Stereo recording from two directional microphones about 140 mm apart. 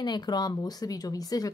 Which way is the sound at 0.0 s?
30° left (ahead or behind).